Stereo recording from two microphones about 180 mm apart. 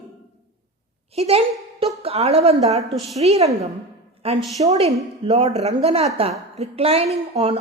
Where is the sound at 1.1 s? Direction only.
35° right (ahead or behind).